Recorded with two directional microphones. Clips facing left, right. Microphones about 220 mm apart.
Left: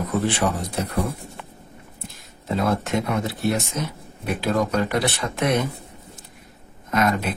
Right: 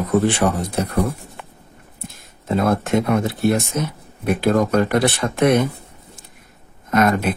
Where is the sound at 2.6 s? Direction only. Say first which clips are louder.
Right 4 dB; 50° right (ahead or behind).